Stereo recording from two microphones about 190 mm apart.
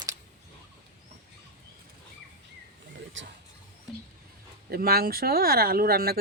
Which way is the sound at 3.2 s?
80° right.